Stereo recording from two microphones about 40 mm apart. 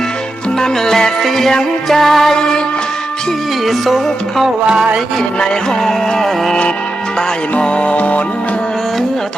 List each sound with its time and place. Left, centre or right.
0.6 s music: centre
3.7 s music: centre
4.6 s a sound: centre
5.8 s music: centre
7.6 s music: left